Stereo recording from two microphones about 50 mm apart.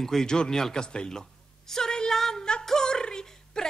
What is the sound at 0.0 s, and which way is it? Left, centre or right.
A woman's voice, centre.